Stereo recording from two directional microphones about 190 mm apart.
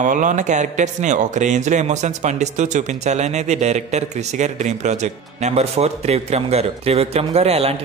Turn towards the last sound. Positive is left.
turn(degrees=-30)  # may be behind; listen again after turning